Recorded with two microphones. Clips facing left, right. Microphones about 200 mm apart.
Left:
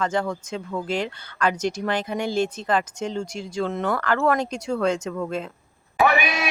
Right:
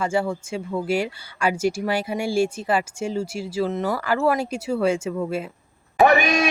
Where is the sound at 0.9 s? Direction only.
10° right (ahead or behind).